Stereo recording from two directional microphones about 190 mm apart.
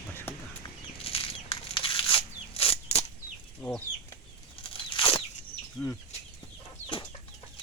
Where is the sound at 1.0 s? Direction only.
30° left (ahead or behind).